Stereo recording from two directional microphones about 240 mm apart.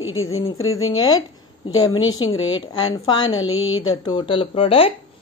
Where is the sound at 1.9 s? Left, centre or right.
Left.